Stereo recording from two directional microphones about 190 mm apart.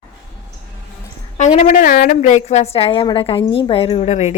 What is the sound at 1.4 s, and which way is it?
A woman's voice, 40° left (ahead or behind).